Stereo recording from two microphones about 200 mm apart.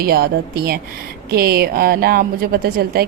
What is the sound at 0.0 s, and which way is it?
Speech, 50° right (ahead or behind).